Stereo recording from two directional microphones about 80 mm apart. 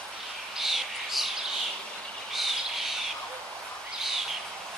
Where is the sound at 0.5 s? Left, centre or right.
Centre.